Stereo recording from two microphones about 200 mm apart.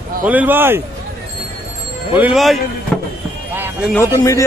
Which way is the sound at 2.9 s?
5° left (ahead or behind).